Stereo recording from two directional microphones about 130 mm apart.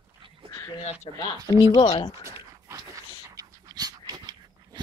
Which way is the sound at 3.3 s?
30° right (ahead or behind).